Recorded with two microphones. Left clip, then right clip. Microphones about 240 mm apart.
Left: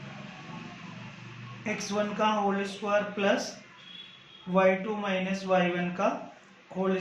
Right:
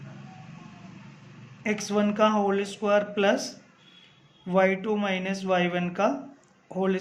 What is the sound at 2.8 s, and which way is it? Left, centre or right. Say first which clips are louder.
Speech: right 4 dB; right.